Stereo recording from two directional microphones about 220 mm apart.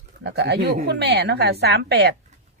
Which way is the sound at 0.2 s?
50° right (ahead or behind).